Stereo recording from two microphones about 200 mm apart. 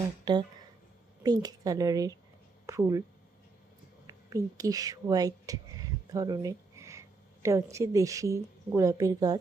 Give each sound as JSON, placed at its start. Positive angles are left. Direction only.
{"t": 1.2, "sound": "a woman's voice", "side_deg": -20}
{"t": 4.0, "sound": "whispering", "side_deg": -15}
{"t": 7.4, "sound": "a woman's voice", "side_deg": -15}